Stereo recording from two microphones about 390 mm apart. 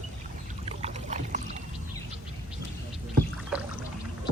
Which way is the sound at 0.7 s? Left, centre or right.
Centre.